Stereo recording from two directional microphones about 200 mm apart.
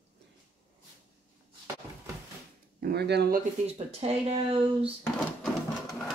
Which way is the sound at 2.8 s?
55° right (ahead or behind).